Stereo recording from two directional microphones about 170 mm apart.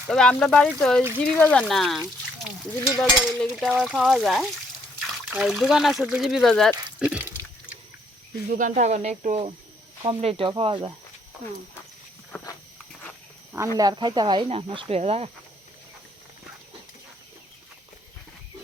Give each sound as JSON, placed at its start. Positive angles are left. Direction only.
{"t": 0.1, "sound": "stir", "side_deg": 5}
{"t": 3.0, "sound": "stir", "side_deg": 0}
{"t": 7.0, "sound": "water", "side_deg": -10}
{"t": 8.5, "sound": "speech", "side_deg": -50}
{"t": 13.7, "sound": "speech", "side_deg": -25}